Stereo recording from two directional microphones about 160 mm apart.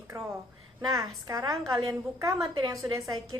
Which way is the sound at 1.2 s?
20° right (ahead or behind).